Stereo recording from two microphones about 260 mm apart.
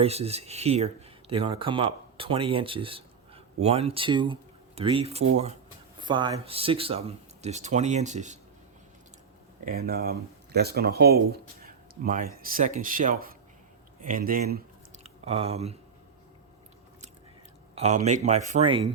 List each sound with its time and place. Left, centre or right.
0.0 s speech: right
9.6 s speech: right
17.7 s speech: right